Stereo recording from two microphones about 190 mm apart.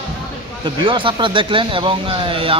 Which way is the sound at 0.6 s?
25° right (ahead or behind).